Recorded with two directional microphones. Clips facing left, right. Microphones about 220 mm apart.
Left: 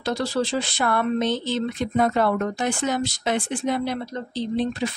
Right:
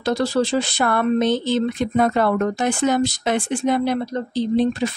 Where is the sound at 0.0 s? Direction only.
45° right (ahead or behind).